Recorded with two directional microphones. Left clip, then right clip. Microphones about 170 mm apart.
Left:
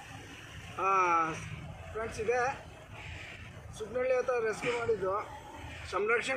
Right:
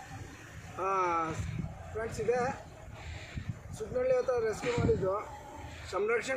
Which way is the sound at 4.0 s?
5° right (ahead or behind).